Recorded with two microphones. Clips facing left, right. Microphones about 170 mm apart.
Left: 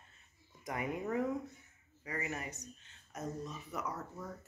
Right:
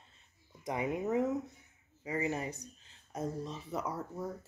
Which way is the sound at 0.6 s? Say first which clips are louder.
Right 4 dB; 20° right (ahead or behind).